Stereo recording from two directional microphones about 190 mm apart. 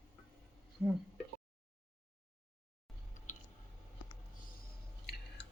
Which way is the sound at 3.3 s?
40° left (ahead or behind).